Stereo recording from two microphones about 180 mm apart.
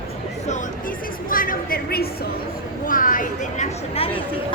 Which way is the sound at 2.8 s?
50° left (ahead or behind).